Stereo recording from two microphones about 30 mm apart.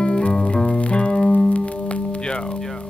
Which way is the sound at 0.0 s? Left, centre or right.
Left.